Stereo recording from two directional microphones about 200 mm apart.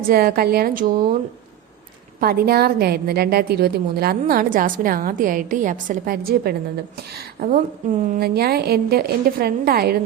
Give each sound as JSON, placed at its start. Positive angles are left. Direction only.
{"t": 0.1, "sound": "a woman's voice", "side_deg": -50}
{"t": 2.2, "sound": "a woman's voice", "side_deg": -50}